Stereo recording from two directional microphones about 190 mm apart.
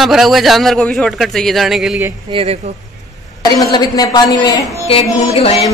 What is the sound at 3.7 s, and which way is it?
Speech, 20° left (ahead or behind).